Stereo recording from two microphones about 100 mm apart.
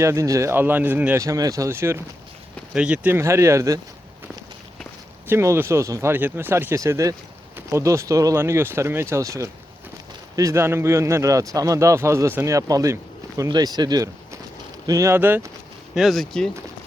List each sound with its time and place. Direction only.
0.0 s speech: 30° right (ahead or behind)
1.2 s speech: 35° right (ahead or behind)
2.7 s speech: 10° right (ahead or behind)
3.2 s speech: 25° right (ahead or behind)
5.3 s speech: 25° right (ahead or behind)
6.7 s speech: 30° right (ahead or behind)
13.5 s speech: 40° right (ahead or behind)
15.1 s speech: 20° right (ahead or behind)
16.0 s speech: centre (ahead or behind)